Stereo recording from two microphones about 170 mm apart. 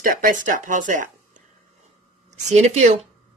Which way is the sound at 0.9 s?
50° right (ahead or behind).